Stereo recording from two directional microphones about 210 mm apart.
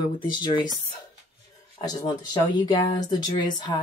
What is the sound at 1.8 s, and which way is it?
Speech, 20° left (ahead or behind).